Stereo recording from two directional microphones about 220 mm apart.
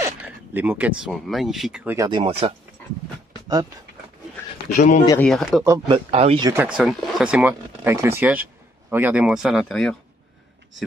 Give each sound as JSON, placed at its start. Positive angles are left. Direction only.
{"t": 0.0, "sound": "speech", "side_deg": -10}
{"t": 2.0, "sound": "speech", "side_deg": -20}
{"t": 4.6, "sound": "speech", "side_deg": 35}
{"t": 5.2, "sound": "speech", "side_deg": 0}
{"t": 5.6, "sound": "speech", "side_deg": -20}
{"t": 6.5, "sound": "speech", "side_deg": -5}